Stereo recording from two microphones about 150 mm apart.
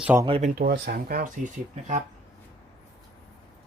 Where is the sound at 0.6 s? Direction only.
80° right.